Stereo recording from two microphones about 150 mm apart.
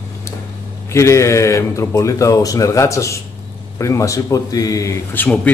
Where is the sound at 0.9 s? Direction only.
20° left (ahead or behind).